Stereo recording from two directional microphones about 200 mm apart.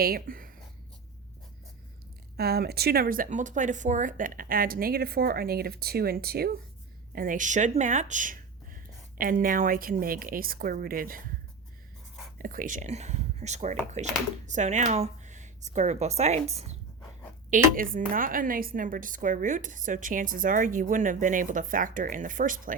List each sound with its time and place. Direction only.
0.0 s speech: 45° right (ahead or behind)
2.3 s speech: 50° right (ahead or behind)
12.4 s a woman's voice: 40° right (ahead or behind)